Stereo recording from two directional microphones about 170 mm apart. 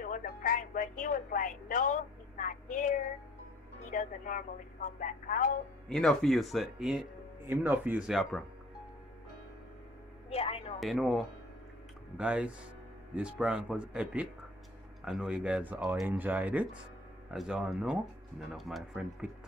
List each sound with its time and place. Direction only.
0.0 s music: 55° left (ahead or behind)
3.9 s speech: 50° left (ahead or behind)
5.9 s speech: centre (ahead or behind)
10.3 s a sound: 35° left (ahead or behind)
10.8 s speech: centre (ahead or behind)